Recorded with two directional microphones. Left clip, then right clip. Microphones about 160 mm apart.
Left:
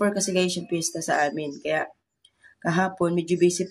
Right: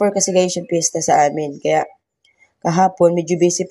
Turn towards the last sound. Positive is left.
turn(degrees=-25)  # may be behind; listen again after turning